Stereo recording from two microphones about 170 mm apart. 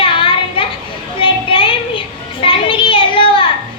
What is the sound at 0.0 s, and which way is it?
Children playing, 30° left (ahead or behind).